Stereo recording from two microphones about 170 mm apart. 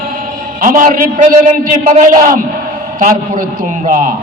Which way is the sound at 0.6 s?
55° right (ahead or behind).